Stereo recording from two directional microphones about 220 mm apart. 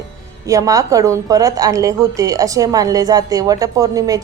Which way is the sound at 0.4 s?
15° right (ahead or behind).